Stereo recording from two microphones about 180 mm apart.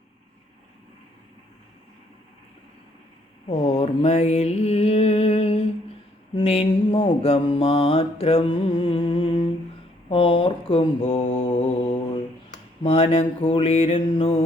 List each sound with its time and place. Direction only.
3.5 s mantra: 35° left (ahead or behind)
12.8 s mantra: 30° left (ahead or behind)